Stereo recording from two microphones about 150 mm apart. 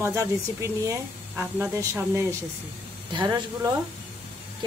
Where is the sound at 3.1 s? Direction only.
25° right (ahead or behind).